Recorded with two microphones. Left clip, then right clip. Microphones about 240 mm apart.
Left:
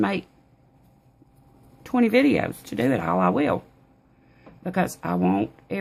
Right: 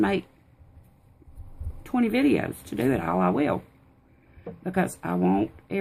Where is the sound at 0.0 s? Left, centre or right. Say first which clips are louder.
Even; left.